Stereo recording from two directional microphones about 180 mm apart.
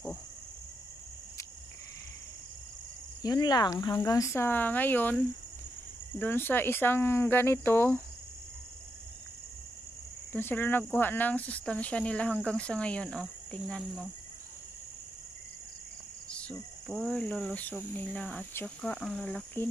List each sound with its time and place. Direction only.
3.2 s speech: 20° left (ahead or behind)
6.1 s speech: 10° left (ahead or behind)
10.3 s speech: 10° left (ahead or behind)
16.3 s speech: 5° left (ahead or behind)